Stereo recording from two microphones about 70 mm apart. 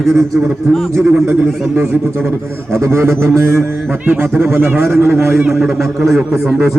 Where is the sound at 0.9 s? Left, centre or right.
Right.